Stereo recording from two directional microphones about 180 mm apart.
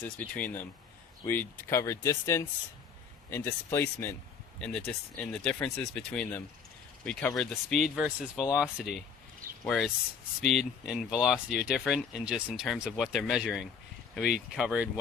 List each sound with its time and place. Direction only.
0.0 s speech: 10° left (ahead or behind)